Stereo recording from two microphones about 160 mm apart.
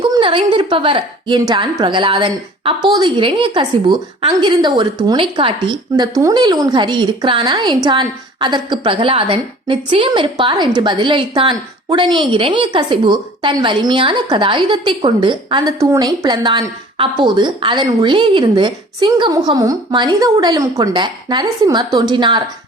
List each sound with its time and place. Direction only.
0.0 s a woman's voice: 30° right (ahead or behind)